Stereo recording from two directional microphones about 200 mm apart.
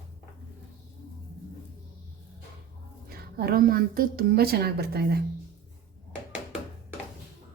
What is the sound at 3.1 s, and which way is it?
A woman's voice, 50° right (ahead or behind).